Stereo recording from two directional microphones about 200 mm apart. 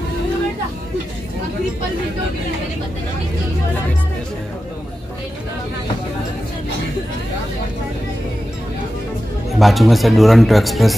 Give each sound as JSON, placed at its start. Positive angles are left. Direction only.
{"t": 9.6, "sound": "speech", "side_deg": 0}